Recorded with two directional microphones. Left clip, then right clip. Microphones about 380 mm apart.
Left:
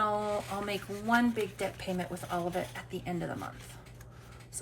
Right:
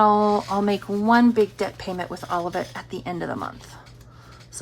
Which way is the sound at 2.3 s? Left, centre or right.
Centre.